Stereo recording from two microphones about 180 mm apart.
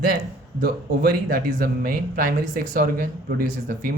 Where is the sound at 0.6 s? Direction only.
55° right (ahead or behind).